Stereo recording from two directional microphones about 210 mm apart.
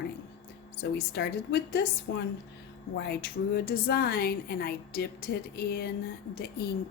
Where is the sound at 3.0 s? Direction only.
50° left (ahead or behind).